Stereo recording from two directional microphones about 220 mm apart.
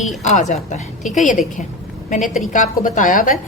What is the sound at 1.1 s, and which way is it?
A woman's voice, 35° left (ahead or behind).